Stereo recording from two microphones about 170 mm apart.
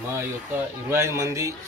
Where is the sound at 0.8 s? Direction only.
15° right (ahead or behind).